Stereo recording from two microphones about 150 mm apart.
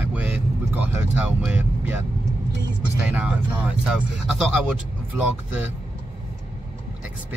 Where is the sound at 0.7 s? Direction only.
10° right (ahead or behind).